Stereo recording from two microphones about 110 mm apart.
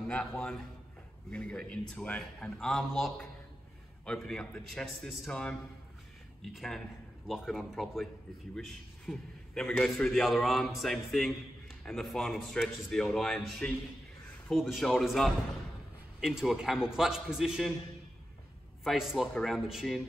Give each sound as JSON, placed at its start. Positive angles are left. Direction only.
{"t": 0.1, "sound": "a man's voice", "side_deg": 5}
{"t": 18.9, "sound": "a man's voice", "side_deg": -5}